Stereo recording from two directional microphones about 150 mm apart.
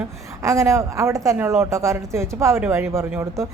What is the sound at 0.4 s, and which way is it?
Speech, 20° right (ahead or behind).